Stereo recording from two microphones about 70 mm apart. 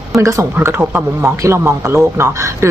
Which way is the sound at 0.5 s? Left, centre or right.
Right.